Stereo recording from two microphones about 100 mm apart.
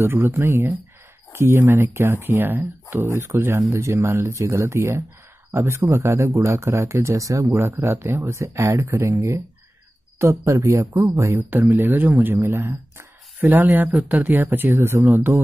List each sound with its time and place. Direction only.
0.0 s speech: 25° right (ahead or behind)